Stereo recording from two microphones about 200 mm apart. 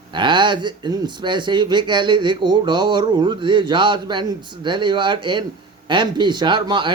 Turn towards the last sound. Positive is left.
turn(degrees=-25)  # may be behind; listen again after turning